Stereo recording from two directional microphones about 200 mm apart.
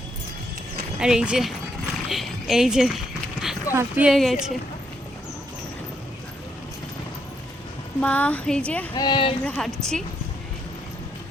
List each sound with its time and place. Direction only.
0.9 s speech: 5° right (ahead or behind)
3.4 s a sound: centre (ahead or behind)
3.8 s speech: 5° right (ahead or behind)
8.0 s speech: 5° left (ahead or behind)
8.9 s speech: 25° left (ahead or behind)
9.4 s speech: 5° left (ahead or behind)